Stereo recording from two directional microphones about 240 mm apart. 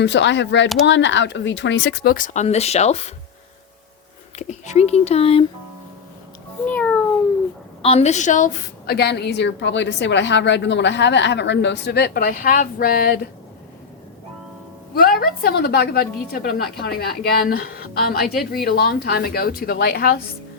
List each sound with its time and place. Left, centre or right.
0.0 s a woman's voice: left
4.4 s a child's voice: left
6.7 s a child's voice: centre
7.8 s a woman's voice: left
15.2 s speech: left